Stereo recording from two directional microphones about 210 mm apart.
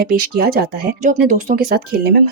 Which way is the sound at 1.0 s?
40° right (ahead or behind).